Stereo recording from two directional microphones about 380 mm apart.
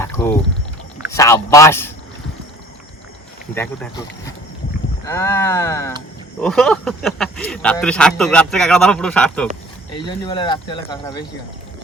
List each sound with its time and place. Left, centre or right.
0.0 s a sound: centre
1.1 s speech: centre
3.5 s speech: centre
5.0 s speech: centre